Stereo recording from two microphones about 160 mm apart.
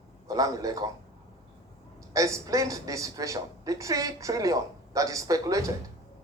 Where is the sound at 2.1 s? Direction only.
20° right (ahead or behind).